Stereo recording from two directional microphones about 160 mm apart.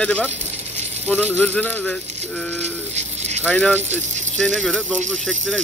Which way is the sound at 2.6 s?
45° right (ahead or behind).